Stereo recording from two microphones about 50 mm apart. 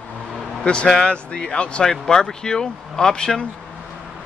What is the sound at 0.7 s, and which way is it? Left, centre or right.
Speech, centre.